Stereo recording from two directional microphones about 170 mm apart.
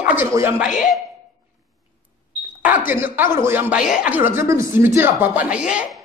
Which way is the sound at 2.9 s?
10° right (ahead or behind).